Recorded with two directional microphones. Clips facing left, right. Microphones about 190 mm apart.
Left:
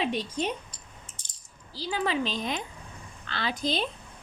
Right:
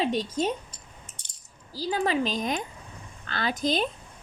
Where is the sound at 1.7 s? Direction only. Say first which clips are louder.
Right 3 dB; 40° right (ahead or behind).